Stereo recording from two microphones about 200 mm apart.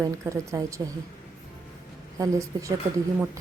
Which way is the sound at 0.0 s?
15° right (ahead or behind).